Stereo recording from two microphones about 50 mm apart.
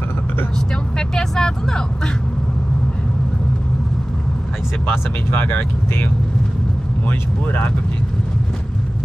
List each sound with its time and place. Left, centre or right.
0.6 s speech: centre
4.9 s speech: left
7.1 s speech: left